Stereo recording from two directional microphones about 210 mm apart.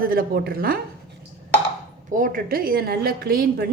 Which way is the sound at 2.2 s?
40° right (ahead or behind).